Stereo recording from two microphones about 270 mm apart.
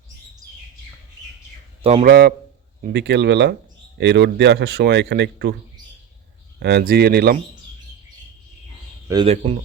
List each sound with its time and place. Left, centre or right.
1.8 s a man's voice: right
2.0 s speech: right
6.6 s speech: right
9.0 s speech: centre